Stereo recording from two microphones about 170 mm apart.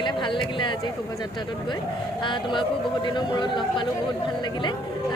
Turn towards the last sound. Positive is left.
turn(degrees=25)  # may be behind; listen again after turning